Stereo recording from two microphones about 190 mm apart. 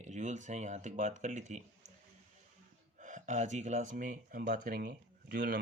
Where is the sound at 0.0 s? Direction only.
40° right (ahead or behind).